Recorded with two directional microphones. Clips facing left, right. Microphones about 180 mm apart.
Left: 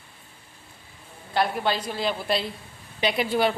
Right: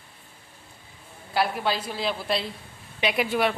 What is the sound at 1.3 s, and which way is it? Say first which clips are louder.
A woman's voice: left 1 dB; 5° right (ahead or behind).